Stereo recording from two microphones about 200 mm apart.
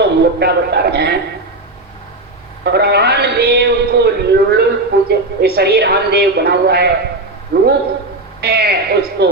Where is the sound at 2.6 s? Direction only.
55° right (ahead or behind).